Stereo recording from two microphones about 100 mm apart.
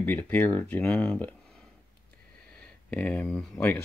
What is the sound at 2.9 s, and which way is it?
Speech, 15° left (ahead or behind).